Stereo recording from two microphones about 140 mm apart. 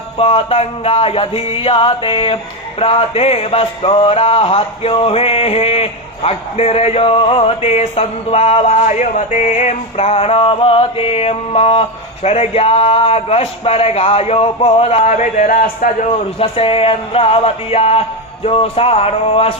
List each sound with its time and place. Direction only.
0.2 s music: 40° left (ahead or behind)
15.2 s speech: 65° left (ahead or behind)
16.0 s music: 40° left (ahead or behind)